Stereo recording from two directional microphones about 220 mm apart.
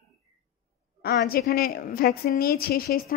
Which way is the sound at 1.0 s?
45° left (ahead or behind).